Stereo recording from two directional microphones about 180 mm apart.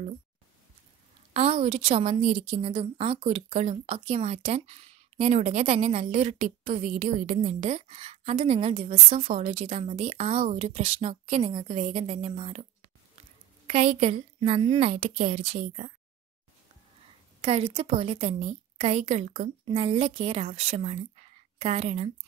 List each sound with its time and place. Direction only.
1.3 s a woman's voice: 35° right (ahead or behind)
13.7 s a woman's voice: 35° right (ahead or behind)
17.4 s a woman's voice: 35° right (ahead or behind)